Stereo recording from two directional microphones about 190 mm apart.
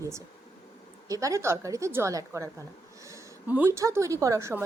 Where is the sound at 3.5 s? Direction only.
10° right (ahead or behind).